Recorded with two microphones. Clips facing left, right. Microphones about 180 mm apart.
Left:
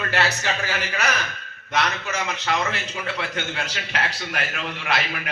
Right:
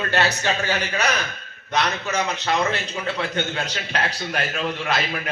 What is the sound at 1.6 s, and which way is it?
A man's voice, 40° right (ahead or behind).